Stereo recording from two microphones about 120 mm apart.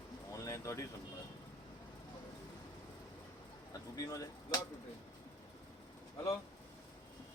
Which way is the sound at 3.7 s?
30° left (ahead or behind).